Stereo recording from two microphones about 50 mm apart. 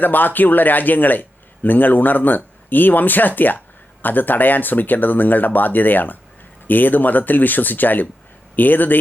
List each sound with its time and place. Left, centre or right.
0.0 s a man's voice: left